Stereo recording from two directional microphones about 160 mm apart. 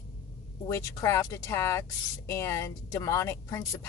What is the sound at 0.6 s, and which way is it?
Speech, 20° left (ahead or behind).